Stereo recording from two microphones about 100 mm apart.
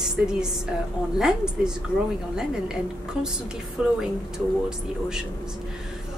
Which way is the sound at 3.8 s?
5° right (ahead or behind).